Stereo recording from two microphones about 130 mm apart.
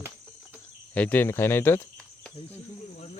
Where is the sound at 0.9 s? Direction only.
10° left (ahead or behind).